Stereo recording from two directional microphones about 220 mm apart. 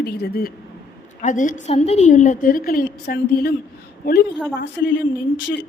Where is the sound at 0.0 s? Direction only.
45° left (ahead or behind).